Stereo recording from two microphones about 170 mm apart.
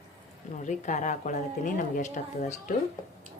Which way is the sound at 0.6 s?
45° left (ahead or behind).